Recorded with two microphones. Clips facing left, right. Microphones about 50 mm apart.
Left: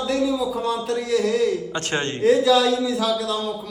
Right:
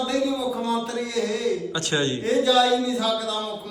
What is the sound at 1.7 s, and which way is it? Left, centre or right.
Speech, left.